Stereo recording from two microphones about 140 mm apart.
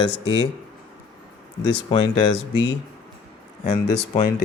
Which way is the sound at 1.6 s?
35° left (ahead or behind).